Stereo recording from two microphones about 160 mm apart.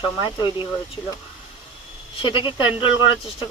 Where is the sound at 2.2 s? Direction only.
30° left (ahead or behind).